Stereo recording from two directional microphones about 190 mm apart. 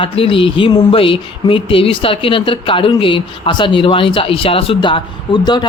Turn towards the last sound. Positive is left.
turn(degrees=25)  # may be behind; listen again after turning